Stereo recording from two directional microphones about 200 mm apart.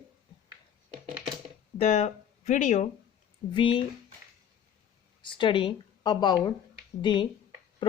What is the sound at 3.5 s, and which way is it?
Speech, 25° left (ahead or behind).